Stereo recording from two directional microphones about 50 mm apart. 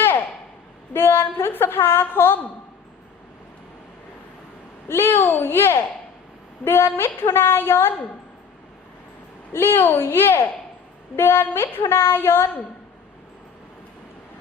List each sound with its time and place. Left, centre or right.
0.0 s a sound: left
0.9 s a woman's voice: left
4.9 s a woman's voice: left
9.5 s a woman's voice: left